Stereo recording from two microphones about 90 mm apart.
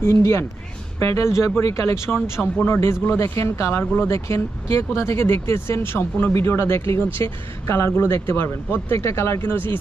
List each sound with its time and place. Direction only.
0.0 s speech: 35° left (ahead or behind)